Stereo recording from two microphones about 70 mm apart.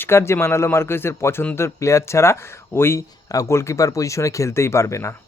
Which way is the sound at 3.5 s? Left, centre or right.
Left.